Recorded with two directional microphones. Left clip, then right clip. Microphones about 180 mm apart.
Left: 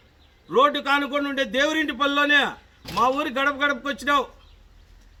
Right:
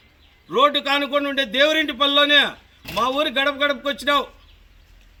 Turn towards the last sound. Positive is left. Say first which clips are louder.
# right 2 dB
turn(degrees=5)  # may be behind; listen again after turning